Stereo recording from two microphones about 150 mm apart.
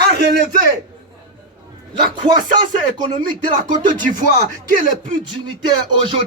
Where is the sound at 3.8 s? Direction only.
60° right (ahead or behind).